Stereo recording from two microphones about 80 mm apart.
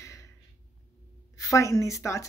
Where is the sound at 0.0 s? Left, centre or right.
Left.